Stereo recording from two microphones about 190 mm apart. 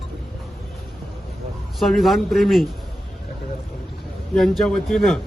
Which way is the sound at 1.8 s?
Centre (ahead or behind).